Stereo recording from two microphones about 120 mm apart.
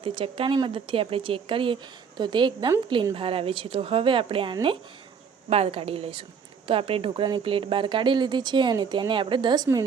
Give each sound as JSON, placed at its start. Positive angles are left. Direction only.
{"t": 0.0, "sound": "speech", "side_deg": -50}